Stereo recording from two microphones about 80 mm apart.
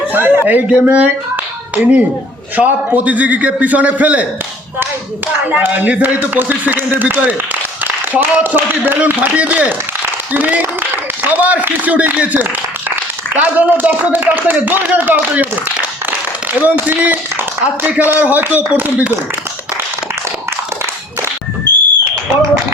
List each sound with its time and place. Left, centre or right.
0.1 s a man's voice: right
5.5 s a man's voice: right
16.6 s a man's voice: right